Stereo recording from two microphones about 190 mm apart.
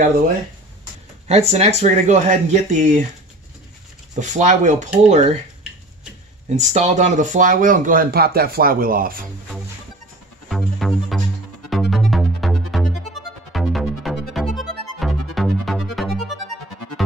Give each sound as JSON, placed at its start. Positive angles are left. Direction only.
{"t": 1.2, "sound": "speech", "side_deg": -35}
{"t": 4.1, "sound": "speech", "side_deg": -40}
{"t": 6.5, "sound": "speech", "side_deg": -40}
{"t": 10.5, "sound": "music", "side_deg": 0}